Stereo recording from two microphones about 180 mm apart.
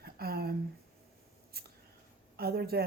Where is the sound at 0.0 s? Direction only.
60° right (ahead or behind).